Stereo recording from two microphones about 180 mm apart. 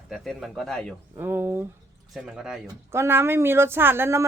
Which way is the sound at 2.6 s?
15° right (ahead or behind).